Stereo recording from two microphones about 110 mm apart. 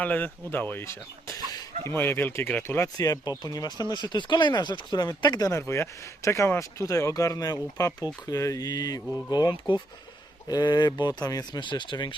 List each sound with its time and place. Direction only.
0.0 s speech: 15° left (ahead or behind); by 5.5 s 35° left (ahead or behind)
5.5 s speech: 25° left (ahead or behind)
11.6 s speech: 45° left (ahead or behind)